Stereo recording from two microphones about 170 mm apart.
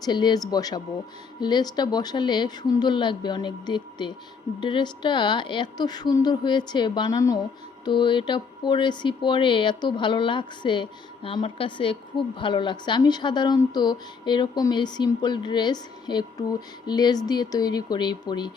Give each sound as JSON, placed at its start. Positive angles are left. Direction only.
{"t": 0.0, "sound": "a woman's voice", "side_deg": 25}